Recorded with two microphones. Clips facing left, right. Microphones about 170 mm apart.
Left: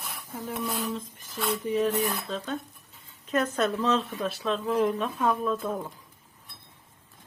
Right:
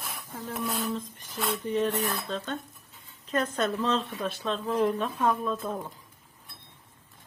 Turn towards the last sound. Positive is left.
turn(degrees=0)  # may be behind; listen again after turning